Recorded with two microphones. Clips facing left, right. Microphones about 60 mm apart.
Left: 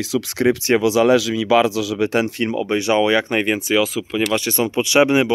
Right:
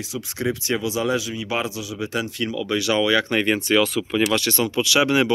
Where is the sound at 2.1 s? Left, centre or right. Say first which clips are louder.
Left 4 dB; left.